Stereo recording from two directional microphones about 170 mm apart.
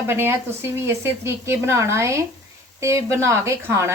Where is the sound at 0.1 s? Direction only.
15° right (ahead or behind).